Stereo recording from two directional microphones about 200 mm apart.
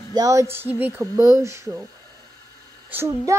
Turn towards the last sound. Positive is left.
turn(degrees=-10)  # may be behind; listen again after turning